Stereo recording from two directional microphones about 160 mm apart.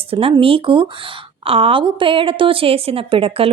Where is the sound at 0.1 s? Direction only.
35° right (ahead or behind).